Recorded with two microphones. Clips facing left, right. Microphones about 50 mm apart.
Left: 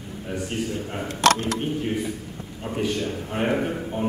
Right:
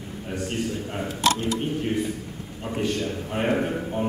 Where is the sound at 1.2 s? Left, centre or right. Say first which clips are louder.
Left 4 dB; left.